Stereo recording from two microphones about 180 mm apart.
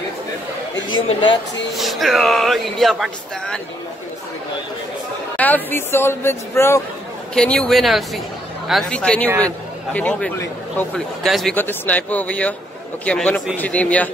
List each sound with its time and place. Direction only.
1.0 s speech: 25° left (ahead or behind)
1.8 s speech: centre (ahead or behind)
5.4 s speech: 10° left (ahead or behind)
11.2 s speech: centre (ahead or behind)
11.5 s speech: 10° left (ahead or behind)